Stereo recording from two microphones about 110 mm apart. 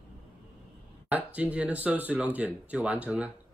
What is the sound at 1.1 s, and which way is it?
Speech, 15° right (ahead or behind).